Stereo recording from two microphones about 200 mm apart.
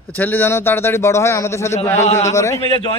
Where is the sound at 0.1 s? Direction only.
10° left (ahead or behind).